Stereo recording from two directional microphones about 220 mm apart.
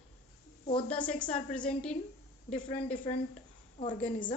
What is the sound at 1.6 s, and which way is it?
Speech, 5° left (ahead or behind).